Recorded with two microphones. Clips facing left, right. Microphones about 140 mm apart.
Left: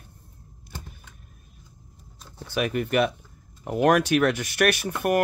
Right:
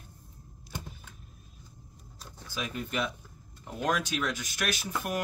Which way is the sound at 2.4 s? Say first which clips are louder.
Left 11 dB; 65° left (ahead or behind).